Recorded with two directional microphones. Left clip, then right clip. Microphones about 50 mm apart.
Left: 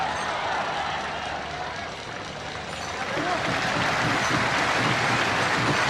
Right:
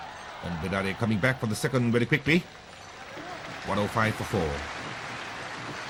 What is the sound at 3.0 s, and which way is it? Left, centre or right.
Speech, left.